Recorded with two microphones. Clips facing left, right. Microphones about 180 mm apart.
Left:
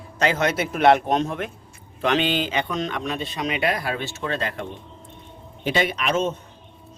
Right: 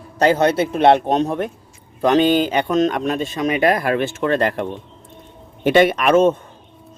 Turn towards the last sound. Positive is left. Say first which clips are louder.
# right 9 dB
turn(degrees=-55)  # may be behind; listen again after turning